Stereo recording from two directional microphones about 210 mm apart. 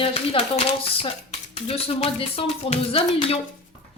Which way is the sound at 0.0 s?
30° left (ahead or behind).